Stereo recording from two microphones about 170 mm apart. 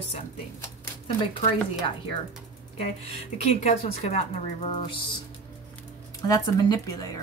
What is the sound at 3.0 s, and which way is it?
Speech, 35° left (ahead or behind).